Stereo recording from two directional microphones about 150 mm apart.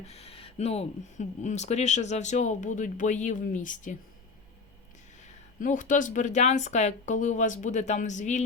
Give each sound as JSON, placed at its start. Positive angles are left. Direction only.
{"t": 0.0, "sound": "speech", "side_deg": 45}
{"t": 5.5, "sound": "speech", "side_deg": 60}